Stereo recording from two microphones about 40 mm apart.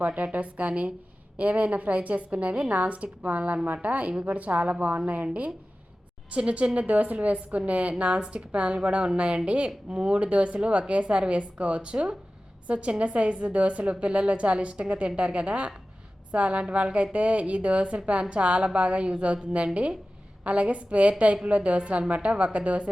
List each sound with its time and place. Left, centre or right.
0.0 s a woman's voice: right